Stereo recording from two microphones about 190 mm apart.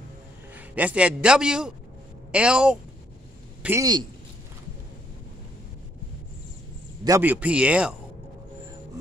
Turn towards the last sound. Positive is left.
turn(degrees=-5)  # may be behind; listen again after turning